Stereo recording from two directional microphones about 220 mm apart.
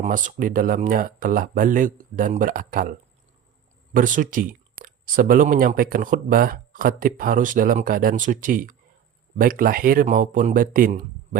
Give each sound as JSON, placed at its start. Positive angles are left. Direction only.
{"t": 0.0, "sound": "speech", "side_deg": -35}
{"t": 3.9, "sound": "speech", "side_deg": -35}